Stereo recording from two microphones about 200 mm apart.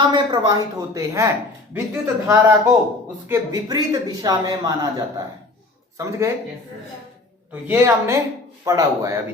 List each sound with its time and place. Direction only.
0.0 s speech: 20° right (ahead or behind)
7.7 s speech: 15° right (ahead or behind)